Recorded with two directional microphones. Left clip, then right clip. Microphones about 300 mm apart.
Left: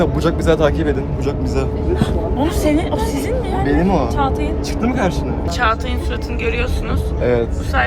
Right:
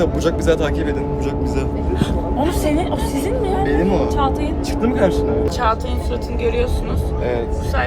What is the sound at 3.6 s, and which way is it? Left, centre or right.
Speech, centre.